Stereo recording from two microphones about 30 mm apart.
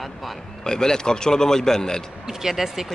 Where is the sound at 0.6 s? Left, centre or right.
Left.